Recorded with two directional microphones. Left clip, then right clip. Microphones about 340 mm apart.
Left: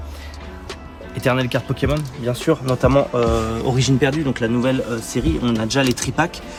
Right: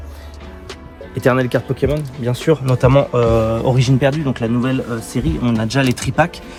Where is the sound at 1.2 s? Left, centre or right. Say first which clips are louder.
Right 4 dB; centre.